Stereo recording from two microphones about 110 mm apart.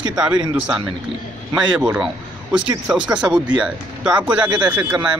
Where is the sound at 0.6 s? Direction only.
10° right (ahead or behind).